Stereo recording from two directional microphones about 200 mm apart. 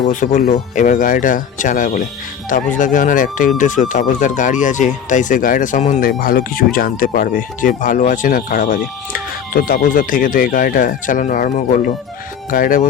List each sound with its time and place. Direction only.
0.0 s speech: 40° left (ahead or behind)